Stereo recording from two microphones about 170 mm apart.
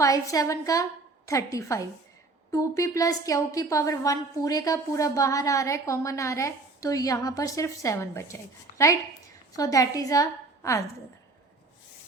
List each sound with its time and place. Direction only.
0.0 s a woman's voice: 20° left (ahead or behind)
9.6 s a woman's voice: 20° left (ahead or behind)